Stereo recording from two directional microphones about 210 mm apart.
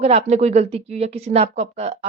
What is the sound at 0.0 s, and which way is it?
A woman's voice, 30° right (ahead or behind).